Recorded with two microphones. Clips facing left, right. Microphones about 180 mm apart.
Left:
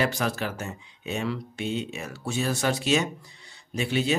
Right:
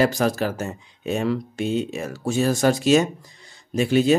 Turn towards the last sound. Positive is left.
turn(degrees=-45)  # may be behind; listen again after turning